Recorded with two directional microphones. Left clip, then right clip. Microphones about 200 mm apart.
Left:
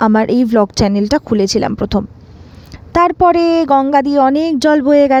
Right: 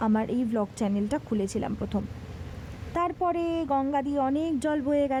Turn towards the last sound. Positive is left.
turn(degrees=35)  # may be behind; listen again after turning